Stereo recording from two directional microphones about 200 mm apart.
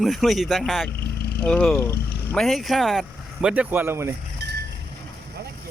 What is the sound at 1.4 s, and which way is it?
Speech, 5° left (ahead or behind).